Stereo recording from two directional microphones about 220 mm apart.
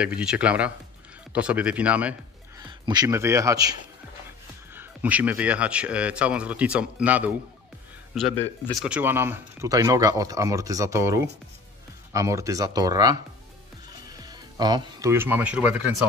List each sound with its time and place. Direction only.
0.0 s speech: 5° right (ahead or behind)
2.8 s speech: 20° right (ahead or behind)
4.7 s speech: 5° right (ahead or behind)
8.6 s speech: 5° right (ahead or behind)